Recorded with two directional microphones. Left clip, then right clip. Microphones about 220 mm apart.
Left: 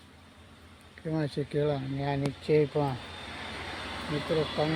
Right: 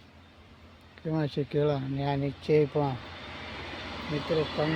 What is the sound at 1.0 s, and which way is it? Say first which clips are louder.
Speech: right 1 dB; 5° right (ahead or behind).